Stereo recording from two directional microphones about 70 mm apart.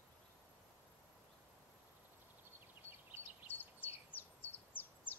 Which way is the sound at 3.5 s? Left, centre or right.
Left.